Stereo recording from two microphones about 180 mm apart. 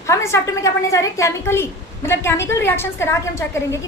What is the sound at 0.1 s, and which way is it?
A woman's voice, 15° left (ahead or behind).